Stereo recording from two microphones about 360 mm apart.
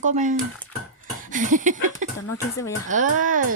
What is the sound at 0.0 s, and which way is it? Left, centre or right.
Speech, centre.